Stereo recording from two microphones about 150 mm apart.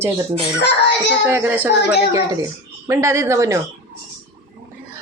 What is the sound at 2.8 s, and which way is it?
Speech, 20° right (ahead or behind).